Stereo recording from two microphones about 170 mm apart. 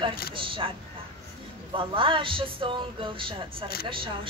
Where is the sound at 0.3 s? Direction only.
30° right (ahead or behind).